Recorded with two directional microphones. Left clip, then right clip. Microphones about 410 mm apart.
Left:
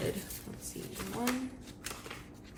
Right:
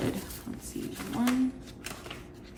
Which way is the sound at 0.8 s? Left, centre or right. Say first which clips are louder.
Right 4 dB; centre.